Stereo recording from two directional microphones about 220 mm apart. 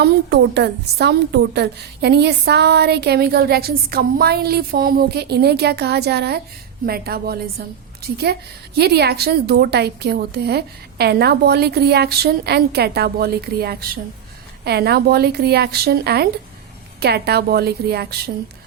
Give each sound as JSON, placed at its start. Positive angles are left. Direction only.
{"t": 0.0, "sound": "a woman's voice", "side_deg": -50}